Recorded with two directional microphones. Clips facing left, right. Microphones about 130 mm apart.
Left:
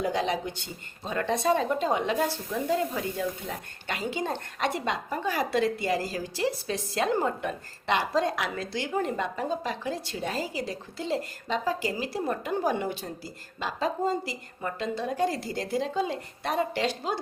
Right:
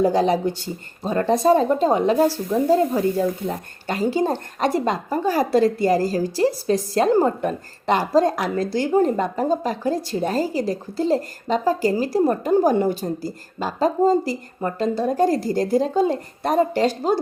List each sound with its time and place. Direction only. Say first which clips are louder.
0.0 s speech: right 10 dB; 40° right (ahead or behind)